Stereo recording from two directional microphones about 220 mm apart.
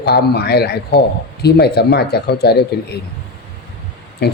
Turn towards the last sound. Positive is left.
turn(degrees=45)  # may be behind; listen again after turning